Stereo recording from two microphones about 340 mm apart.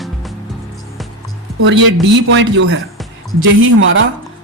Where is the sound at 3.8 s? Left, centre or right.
Right.